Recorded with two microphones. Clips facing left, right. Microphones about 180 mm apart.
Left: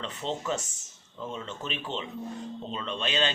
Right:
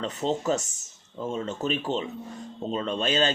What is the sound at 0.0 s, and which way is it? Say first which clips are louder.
Speech: right 6 dB; 40° right (ahead or behind).